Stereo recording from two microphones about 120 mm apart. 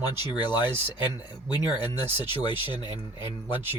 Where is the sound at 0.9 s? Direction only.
40° left (ahead or behind).